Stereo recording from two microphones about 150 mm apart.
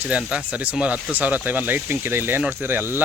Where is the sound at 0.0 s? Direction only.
10° right (ahead or behind).